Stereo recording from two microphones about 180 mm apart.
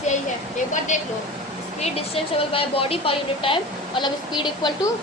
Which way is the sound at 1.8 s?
30° left (ahead or behind).